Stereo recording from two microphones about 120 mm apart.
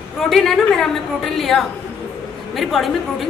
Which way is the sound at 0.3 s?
5° left (ahead or behind).